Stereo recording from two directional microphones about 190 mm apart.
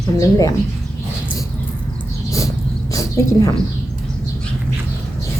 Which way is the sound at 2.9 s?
15° left (ahead or behind).